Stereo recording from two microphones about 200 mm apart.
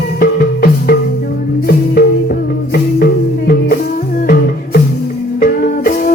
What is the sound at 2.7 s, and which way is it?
Music, 50° left (ahead or behind).